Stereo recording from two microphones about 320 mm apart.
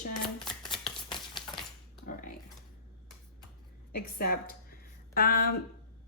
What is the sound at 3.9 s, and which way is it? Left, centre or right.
Speech, left.